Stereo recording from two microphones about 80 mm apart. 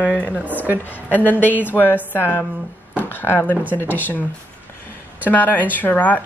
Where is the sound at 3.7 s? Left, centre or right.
Left.